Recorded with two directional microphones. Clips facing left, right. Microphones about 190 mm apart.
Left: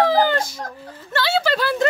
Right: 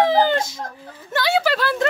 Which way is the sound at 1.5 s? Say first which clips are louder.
Left 1 dB; centre (ahead or behind).